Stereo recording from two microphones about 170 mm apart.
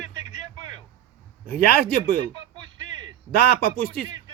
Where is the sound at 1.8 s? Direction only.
55° left (ahead or behind).